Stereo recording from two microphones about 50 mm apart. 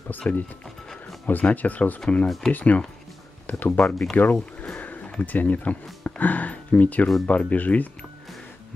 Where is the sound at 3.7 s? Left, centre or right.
Centre.